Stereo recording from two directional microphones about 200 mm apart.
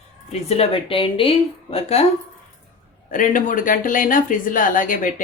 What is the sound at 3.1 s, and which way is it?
Speech, 40° left (ahead or behind).